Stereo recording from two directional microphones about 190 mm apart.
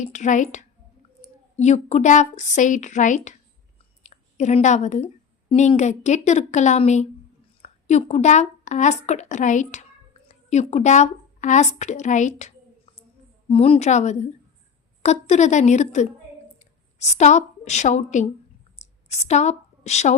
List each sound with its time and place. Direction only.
0.0 s a woman's voice: 40° left (ahead or behind)